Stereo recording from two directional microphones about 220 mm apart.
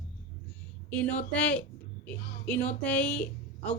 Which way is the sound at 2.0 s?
5° left (ahead or behind).